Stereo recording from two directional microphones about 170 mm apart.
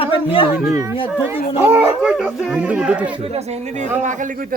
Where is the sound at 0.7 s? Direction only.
20° right (ahead or behind).